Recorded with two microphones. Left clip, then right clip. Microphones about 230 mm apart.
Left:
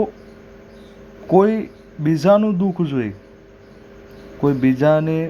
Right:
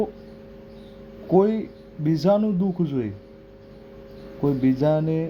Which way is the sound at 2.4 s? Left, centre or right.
Left.